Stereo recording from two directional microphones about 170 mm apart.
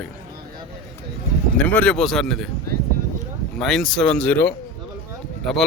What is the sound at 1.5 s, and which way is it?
Speech, 5° left (ahead or behind).